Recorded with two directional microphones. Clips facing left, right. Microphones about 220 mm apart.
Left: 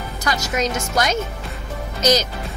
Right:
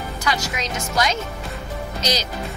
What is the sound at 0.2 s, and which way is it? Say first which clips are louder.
Speech: left 4 dB; 45° left (ahead or behind).